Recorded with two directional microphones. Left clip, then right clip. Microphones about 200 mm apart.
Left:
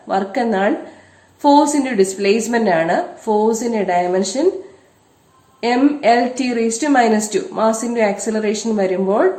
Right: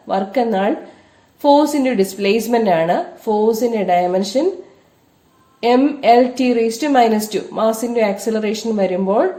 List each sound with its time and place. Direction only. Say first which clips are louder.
0.1 s a woman's voice: right 1 dB; 35° right (ahead or behind)
5.5 s a woman's voice: right 1 dB; 35° right (ahead or behind)